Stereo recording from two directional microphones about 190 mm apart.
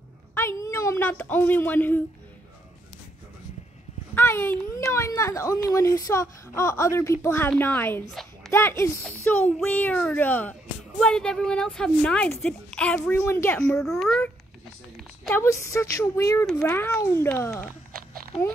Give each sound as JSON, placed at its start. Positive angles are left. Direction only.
{"t": 0.3, "sound": "speech", "side_deg": 15}
{"t": 4.1, "sound": "a child's voice", "side_deg": 10}
{"t": 15.2, "sound": "a child's voice", "side_deg": 15}